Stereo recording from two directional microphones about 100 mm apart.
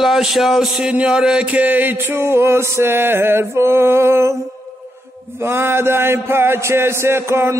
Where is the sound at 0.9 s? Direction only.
10° right (ahead or behind).